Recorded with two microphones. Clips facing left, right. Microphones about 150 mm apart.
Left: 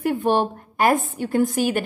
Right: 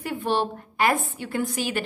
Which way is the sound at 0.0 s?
50° left (ahead or behind).